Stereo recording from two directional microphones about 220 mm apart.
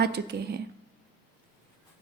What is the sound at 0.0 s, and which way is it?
Speech, 50° right (ahead or behind).